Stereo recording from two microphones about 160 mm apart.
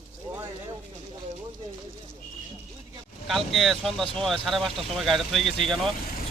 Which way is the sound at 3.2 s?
Centre (ahead or behind).